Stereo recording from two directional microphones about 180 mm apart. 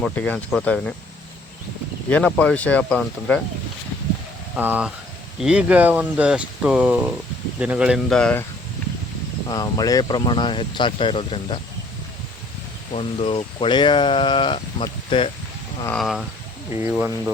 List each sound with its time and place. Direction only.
0.0 s speech: 10° left (ahead or behind)
2.0 s speech: 10° left (ahead or behind)
4.5 s speech: 10° right (ahead or behind); by 8.4 s 5° left (ahead or behind)
9.5 s speech: 20° left (ahead or behind)
12.9 s speech: 30° left (ahead or behind)
15.9 s speech: centre (ahead or behind)
16.9 s speech: 10° right (ahead or behind)